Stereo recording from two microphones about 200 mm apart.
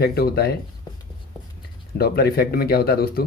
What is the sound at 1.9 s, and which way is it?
Speech, 50° left (ahead or behind).